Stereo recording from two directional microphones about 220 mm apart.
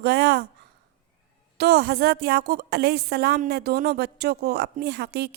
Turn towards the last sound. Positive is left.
turn(degrees=-50)  # may be behind; listen again after turning